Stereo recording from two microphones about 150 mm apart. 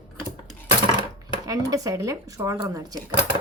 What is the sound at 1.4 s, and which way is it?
A woman's voice, 25° right (ahead or behind).